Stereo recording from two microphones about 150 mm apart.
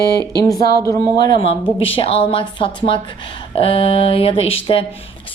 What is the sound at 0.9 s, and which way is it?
A woman's voice, 25° left (ahead or behind).